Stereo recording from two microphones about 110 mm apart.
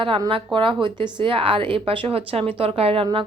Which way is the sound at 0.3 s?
50° right (ahead or behind).